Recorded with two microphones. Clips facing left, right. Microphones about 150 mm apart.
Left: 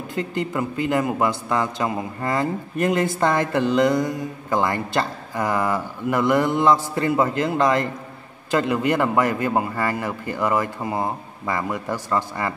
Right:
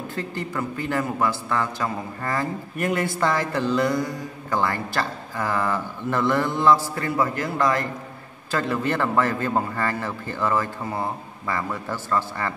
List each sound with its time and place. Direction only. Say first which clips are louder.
0.1 s a man's voice: left 7 dB; 20° left (ahead or behind)